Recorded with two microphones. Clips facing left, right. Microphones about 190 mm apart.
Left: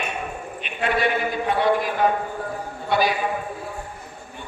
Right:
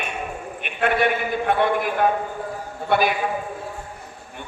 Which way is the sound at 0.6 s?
55° right (ahead or behind).